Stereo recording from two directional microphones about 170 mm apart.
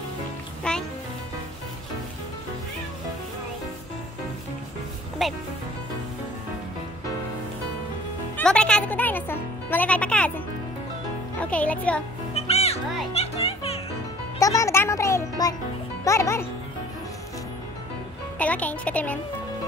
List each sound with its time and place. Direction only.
0.7 s music: 5° left (ahead or behind)
5.2 s speech: centre (ahead or behind)
8.4 s music: 5° left (ahead or behind)
11.3 s a child's voice: 10° left (ahead or behind)
12.4 s music: 35° left (ahead or behind)
14.4 s a child's voice: 20° left (ahead or behind)
18.4 s a child's voice: 10° left (ahead or behind)